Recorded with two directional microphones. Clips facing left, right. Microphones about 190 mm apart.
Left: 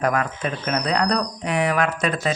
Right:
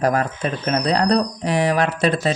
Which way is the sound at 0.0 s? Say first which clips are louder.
Right 3 dB; 35° right (ahead or behind).